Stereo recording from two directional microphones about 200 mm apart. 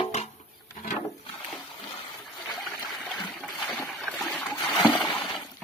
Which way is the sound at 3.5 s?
Centre (ahead or behind).